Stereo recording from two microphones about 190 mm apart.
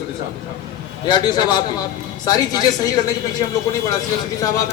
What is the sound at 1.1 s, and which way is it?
A man's voice, 25° left (ahead or behind).